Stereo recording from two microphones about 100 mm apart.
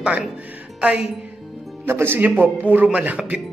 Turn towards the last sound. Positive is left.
turn(degrees=-10)  # may be behind; listen again after turning